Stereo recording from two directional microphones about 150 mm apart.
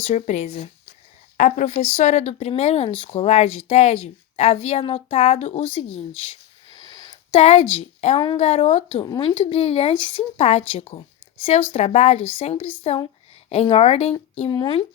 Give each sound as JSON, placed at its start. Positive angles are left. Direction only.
{"t": 0.0, "sound": "speech", "side_deg": 50}
{"t": 1.4, "sound": "speech", "side_deg": 55}
{"t": 6.7, "sound": "a sound", "side_deg": 25}
{"t": 7.4, "sound": "a woman's voice", "side_deg": 40}
{"t": 9.0, "sound": "speech", "side_deg": 30}